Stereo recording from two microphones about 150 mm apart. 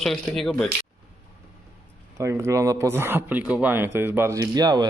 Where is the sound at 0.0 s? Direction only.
Centre (ahead or behind).